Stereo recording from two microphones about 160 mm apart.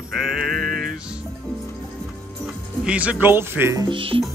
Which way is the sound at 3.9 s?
35° right (ahead or behind).